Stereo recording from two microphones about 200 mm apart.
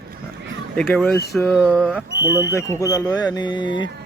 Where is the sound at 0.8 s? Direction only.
Centre (ahead or behind).